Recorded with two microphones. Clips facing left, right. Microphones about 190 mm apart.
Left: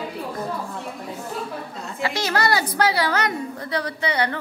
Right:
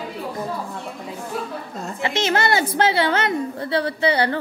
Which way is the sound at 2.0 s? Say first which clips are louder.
Right 2 dB; 25° right (ahead or behind).